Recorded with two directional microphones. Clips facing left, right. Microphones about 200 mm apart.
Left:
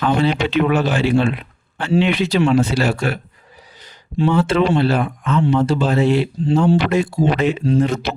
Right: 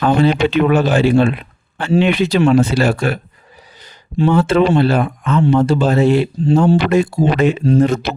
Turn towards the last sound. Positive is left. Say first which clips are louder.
# right 4 dB
turn(degrees=-45)  # may be behind; listen again after turning